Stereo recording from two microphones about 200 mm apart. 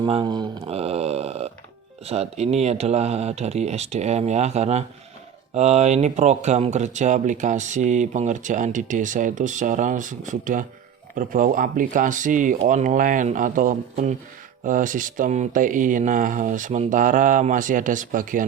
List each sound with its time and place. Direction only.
0.0 s speech: 25° right (ahead or behind); by 18.4 s 40° right (ahead or behind)